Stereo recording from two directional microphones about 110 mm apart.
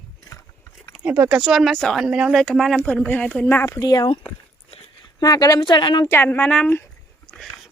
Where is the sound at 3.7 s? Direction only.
35° left (ahead or behind).